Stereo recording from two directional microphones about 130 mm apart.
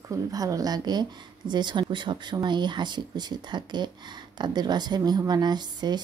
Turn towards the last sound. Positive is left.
turn(degrees=-35)  # may be behind; listen again after turning